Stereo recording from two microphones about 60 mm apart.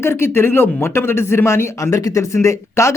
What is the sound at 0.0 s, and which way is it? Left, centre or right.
Speech, left.